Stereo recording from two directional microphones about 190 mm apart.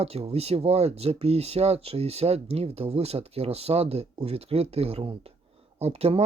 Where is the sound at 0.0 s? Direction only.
30° right (ahead or behind).